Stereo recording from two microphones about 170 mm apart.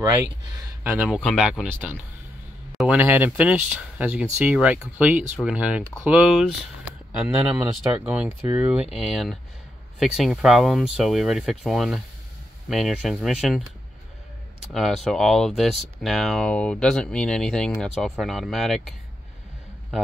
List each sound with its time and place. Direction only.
0.0 s speech: 15° right (ahead or behind)
0.9 s speech: 5° right (ahead or behind)
14.6 s speech: centre (ahead or behind)